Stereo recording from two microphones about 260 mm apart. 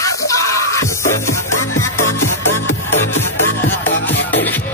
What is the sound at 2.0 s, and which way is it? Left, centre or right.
Music, left.